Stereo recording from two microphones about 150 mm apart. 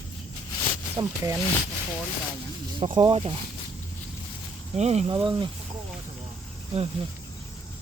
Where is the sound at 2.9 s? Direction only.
35° right (ahead or behind).